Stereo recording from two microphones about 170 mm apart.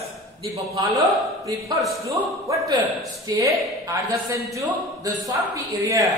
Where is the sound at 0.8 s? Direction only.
Centre (ahead or behind).